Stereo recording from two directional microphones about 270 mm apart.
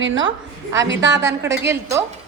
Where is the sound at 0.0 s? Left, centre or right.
Right.